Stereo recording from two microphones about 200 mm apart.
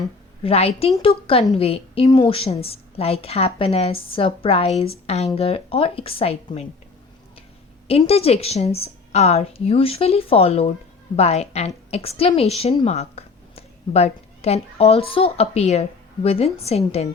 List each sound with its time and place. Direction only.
0.4 s a woman's voice: 30° left (ahead or behind)
7.9 s a woman's voice: 30° left (ahead or behind)